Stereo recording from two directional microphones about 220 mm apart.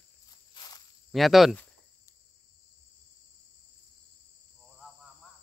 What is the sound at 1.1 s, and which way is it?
Speech, centre (ahead or behind).